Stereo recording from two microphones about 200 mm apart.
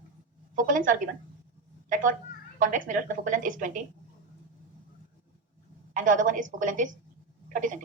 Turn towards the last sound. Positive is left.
turn(degrees=-40)  # may be behind; listen again after turning